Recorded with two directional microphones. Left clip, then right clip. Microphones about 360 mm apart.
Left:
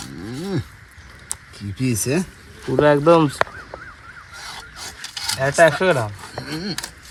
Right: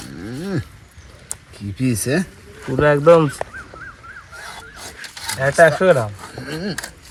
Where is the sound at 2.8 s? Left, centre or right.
Left.